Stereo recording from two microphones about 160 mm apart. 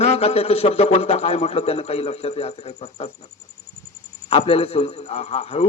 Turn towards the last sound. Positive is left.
turn(degrees=40)  # may be behind; listen again after turning